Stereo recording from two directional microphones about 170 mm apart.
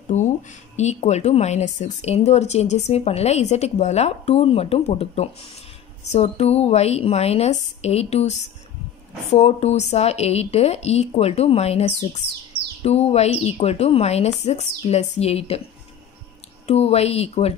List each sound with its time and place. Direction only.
0.1 s a sound: 45° left (ahead or behind)
0.7 s speech: 40° left (ahead or behind)
16.6 s speech: 40° left (ahead or behind)